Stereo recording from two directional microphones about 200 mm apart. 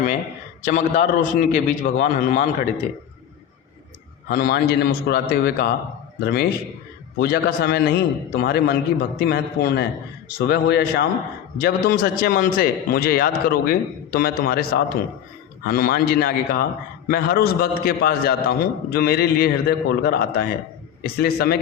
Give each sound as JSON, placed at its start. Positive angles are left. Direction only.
{"t": 0.6, "sound": "a man's voice", "side_deg": 40}
{"t": 4.3, "sound": "a man's voice", "side_deg": 45}